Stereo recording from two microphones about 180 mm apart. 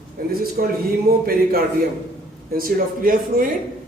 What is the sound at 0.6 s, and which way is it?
Speech, 55° right (ahead or behind).